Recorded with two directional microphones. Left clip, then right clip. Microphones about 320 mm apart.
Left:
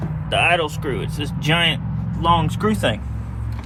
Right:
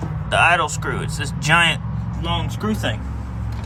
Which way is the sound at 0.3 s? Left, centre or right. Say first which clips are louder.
Right 2 dB; centre.